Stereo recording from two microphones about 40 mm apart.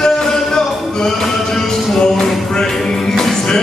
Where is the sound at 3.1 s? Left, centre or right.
Centre.